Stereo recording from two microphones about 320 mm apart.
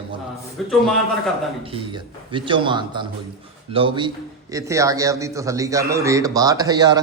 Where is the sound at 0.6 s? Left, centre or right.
Centre.